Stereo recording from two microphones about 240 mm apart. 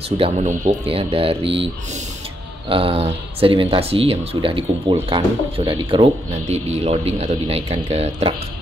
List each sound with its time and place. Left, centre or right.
0.2 s speech: right
2.7 s speech: right